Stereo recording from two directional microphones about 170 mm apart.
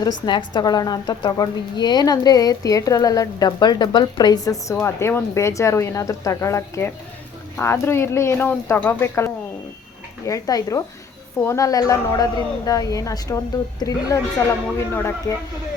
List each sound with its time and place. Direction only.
0.3 s a woman's voice: 25° left (ahead or behind)